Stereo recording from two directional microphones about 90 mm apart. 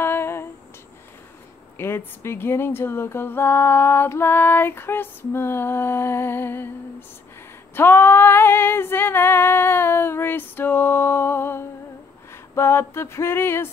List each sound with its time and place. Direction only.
0.0 s a sound: 25° left (ahead or behind)
1.8 s speech: 25° left (ahead or behind)
7.7 s speech: 25° left (ahead or behind)